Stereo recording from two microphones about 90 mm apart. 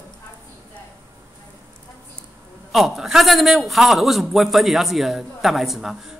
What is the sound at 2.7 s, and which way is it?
A man's voice, centre (ahead or behind).